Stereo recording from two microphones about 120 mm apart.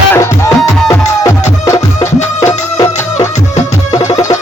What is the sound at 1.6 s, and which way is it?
Music, 25° left (ahead or behind).